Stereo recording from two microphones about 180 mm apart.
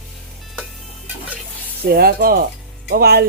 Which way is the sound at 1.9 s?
60° right (ahead or behind).